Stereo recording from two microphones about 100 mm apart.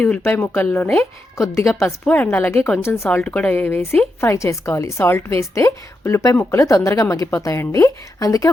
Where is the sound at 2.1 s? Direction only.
20° left (ahead or behind).